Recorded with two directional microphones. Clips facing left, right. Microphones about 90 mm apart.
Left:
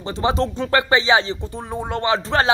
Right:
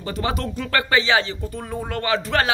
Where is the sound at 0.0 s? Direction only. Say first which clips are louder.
Left 5 dB; 25° left (ahead or behind).